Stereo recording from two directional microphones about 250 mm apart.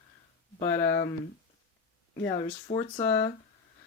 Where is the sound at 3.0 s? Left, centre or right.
Centre.